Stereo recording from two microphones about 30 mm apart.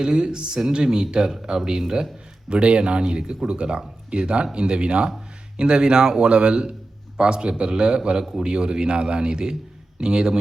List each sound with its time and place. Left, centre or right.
0.0 s speech: right
2.5 s speech: right